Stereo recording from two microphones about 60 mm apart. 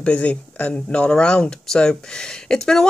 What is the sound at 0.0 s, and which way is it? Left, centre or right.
Speech, left.